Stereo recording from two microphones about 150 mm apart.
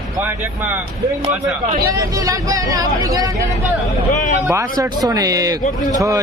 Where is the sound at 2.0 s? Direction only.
20° right (ahead or behind).